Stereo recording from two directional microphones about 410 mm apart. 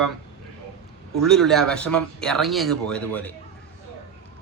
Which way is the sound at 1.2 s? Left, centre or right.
Centre.